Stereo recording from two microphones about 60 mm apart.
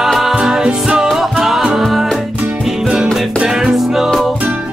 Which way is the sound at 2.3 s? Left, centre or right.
Right.